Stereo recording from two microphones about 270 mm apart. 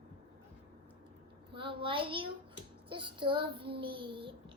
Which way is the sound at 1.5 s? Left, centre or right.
Centre.